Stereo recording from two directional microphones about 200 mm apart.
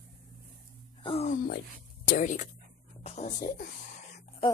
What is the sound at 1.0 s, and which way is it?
Speech, 30° left (ahead or behind).